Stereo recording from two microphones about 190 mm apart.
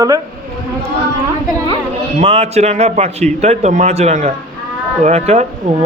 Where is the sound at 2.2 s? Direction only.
30° right (ahead or behind).